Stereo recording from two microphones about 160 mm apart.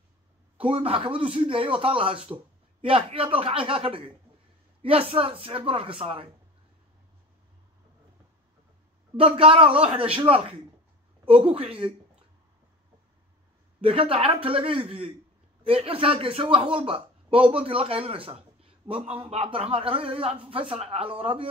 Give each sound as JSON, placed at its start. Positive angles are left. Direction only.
{"t": 0.6, "sound": "speech", "side_deg": -35}
{"t": 9.1, "sound": "speech", "side_deg": -35}
{"t": 13.7, "sound": "speech", "side_deg": -35}